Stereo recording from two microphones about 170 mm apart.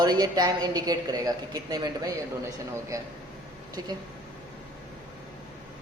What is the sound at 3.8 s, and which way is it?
Speech, 20° right (ahead or behind).